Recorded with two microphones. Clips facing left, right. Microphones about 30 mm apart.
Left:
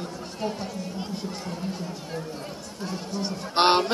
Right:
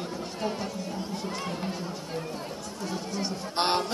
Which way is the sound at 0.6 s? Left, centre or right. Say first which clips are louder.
Even; centre.